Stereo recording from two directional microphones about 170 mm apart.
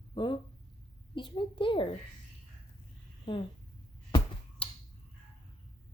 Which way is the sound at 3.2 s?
30° left (ahead or behind).